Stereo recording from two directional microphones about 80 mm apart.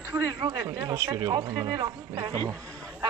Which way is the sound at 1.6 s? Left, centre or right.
Right.